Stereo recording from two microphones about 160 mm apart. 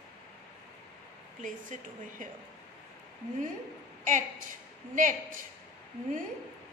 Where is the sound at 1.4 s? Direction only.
55° right (ahead or behind).